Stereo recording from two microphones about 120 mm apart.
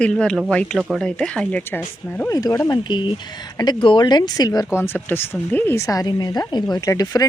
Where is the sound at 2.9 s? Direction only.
40° left (ahead or behind).